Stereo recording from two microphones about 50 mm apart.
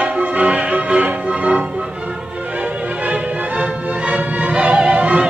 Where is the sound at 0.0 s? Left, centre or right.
Right.